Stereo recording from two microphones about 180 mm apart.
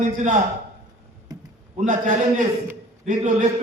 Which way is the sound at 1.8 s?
45° right (ahead or behind).